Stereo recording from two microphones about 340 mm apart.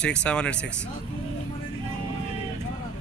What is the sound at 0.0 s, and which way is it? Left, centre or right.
Speech, centre.